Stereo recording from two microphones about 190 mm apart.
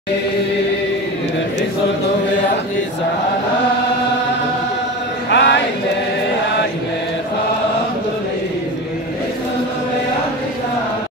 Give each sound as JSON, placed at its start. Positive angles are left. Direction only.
{"t": 5.3, "sound": "music", "side_deg": 65}